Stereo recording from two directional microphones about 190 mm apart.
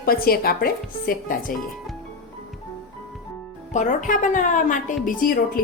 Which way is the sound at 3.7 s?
40° left (ahead or behind).